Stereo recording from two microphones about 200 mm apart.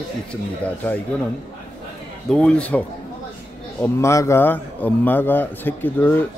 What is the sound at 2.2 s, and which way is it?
Speech, 5° left (ahead or behind).